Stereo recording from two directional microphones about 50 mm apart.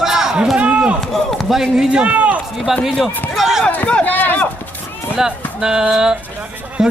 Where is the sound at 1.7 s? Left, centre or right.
Right.